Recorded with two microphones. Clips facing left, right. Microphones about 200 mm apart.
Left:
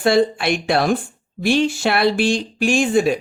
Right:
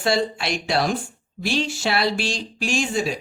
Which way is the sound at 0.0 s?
55° left (ahead or behind).